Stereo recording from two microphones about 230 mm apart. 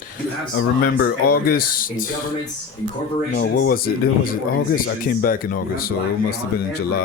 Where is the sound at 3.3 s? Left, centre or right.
Left.